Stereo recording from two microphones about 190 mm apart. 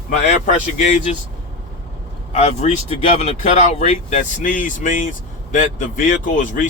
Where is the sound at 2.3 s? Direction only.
35° left (ahead or behind).